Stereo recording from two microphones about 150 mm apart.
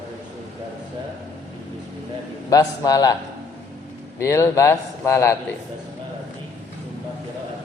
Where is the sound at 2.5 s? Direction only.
25° left (ahead or behind).